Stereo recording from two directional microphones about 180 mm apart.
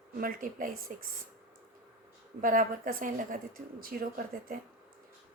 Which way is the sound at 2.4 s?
50° right (ahead or behind).